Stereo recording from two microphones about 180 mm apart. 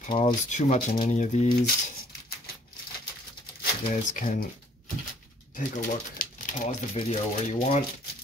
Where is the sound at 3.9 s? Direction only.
45° left (ahead or behind).